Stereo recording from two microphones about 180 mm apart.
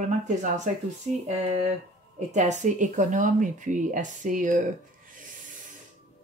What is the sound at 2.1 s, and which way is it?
Speech, 40° right (ahead or behind).